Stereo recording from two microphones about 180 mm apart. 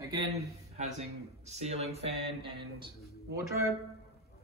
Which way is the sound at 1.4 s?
35° right (ahead or behind).